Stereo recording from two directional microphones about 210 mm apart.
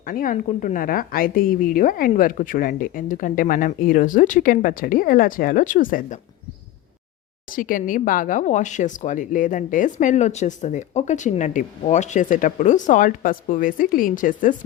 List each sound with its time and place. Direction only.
0.0 s speech: 40° left (ahead or behind)
7.5 s speech: 40° left (ahead or behind)